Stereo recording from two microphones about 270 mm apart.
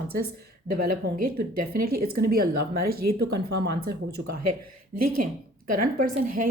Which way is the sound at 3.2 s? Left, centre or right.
Right.